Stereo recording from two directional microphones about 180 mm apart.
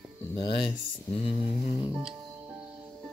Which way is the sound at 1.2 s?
35° left (ahead or behind).